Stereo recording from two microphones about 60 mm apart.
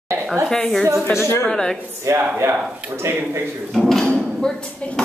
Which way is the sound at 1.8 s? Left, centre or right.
Right.